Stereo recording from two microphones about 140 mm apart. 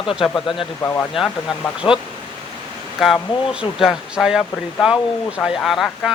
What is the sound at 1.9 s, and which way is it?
Speech, 40° left (ahead or behind).